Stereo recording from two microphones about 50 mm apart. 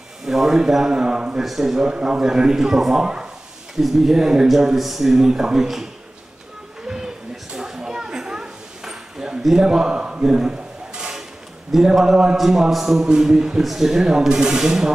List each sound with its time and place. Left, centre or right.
0.2 s speech: centre
1.4 s speech: centre
7.5 s a sound: centre
11.8 s a man's voice: centre